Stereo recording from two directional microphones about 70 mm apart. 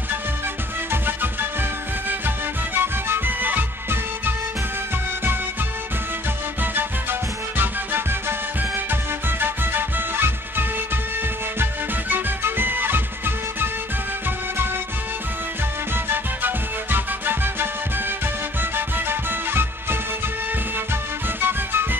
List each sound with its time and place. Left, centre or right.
2.0 s music: right
6.6 s music: right
16.1 s music: right
21.4 s music: right